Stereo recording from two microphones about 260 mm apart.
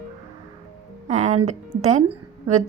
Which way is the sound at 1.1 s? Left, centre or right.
Right.